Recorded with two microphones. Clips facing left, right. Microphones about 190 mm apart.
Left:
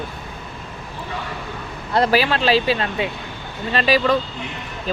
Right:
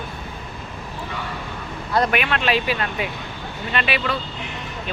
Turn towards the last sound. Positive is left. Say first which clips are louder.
# left 6 dB
turn(degrees=35)  # may be behind; listen again after turning